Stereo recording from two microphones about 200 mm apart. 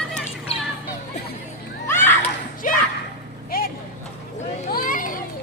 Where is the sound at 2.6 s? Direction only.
40° left (ahead or behind).